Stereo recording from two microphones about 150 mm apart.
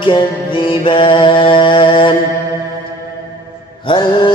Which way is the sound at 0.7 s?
35° left (ahead or behind).